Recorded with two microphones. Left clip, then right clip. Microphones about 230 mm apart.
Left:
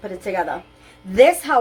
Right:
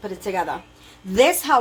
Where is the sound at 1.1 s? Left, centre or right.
Right.